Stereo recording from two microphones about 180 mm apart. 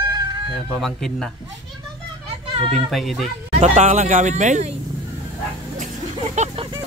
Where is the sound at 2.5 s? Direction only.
30° right (ahead or behind).